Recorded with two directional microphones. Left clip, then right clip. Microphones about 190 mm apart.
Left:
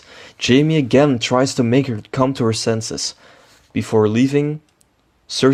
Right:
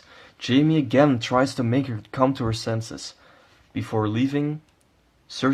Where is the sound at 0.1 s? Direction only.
30° left (ahead or behind).